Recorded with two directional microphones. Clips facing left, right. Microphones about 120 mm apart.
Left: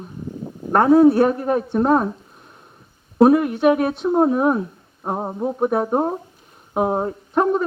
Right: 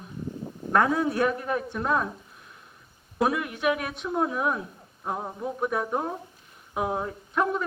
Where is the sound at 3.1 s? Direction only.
35° left (ahead or behind).